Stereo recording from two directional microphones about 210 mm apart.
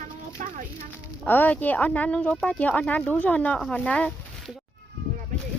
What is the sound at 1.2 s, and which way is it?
Speech, 10° left (ahead or behind).